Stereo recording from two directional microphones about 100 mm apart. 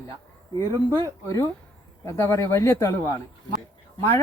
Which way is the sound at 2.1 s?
30° left (ahead or behind).